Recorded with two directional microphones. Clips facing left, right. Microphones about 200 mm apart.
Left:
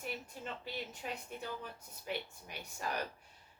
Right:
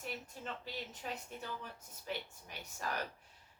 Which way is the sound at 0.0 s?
10° left (ahead or behind).